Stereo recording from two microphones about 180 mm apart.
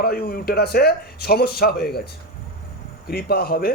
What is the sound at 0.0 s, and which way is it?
Speech, 55° left (ahead or behind).